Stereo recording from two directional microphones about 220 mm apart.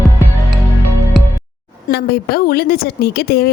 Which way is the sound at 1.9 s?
45° left (ahead or behind).